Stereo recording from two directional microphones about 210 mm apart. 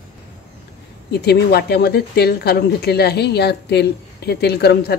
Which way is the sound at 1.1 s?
50° left (ahead or behind).